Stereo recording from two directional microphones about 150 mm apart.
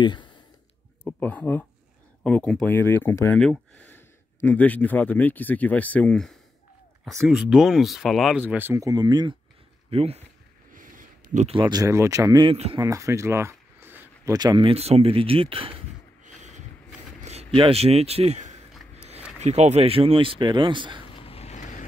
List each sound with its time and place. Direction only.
0.0 s a sound: 30° left (ahead or behind)
1.0 s speech: 10° left (ahead or behind); by 9.3 s 25° right (ahead or behind)
9.8 s speech: 40° right (ahead or behind)
10.7 s a sound: 65° right (ahead or behind)
11.4 s speech: 35° right (ahead or behind)
12.4 s speech: 40° right (ahead or behind)
12.8 s a sound: 20° right (ahead or behind)
14.3 s speech: 30° right (ahead or behind)
14.7 s speech: 45° right (ahead or behind)
16.3 s a sound: 55° right (ahead or behind)
17.2 s speech: 45° right (ahead or behind)
21.2 s vehicle: 40° left (ahead or behind)